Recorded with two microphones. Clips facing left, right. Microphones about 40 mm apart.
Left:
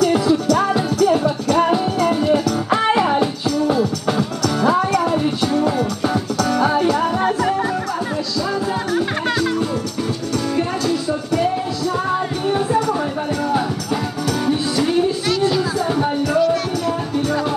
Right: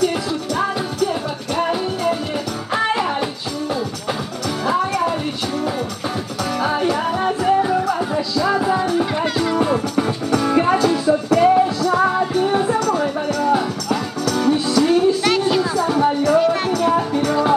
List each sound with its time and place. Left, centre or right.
1.1 s music: centre
5.0 s music: centre
6.5 s music: centre
8.4 s music: centre
14.4 s music: centre
15.9 s music: centre
16.3 s music: right